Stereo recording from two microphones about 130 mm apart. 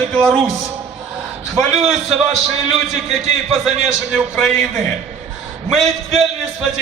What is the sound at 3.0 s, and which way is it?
A man's voice, 55° right (ahead or behind).